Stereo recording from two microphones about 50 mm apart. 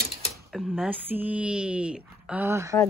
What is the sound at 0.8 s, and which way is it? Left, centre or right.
Speech, right.